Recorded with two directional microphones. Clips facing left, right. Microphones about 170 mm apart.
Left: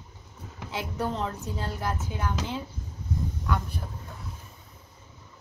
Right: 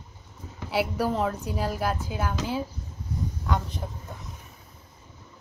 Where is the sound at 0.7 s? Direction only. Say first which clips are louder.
Right 5 dB; 10° right (ahead or behind).